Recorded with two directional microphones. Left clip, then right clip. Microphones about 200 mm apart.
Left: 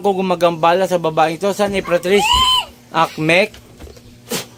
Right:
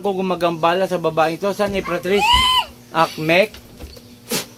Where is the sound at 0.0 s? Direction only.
40° left (ahead or behind).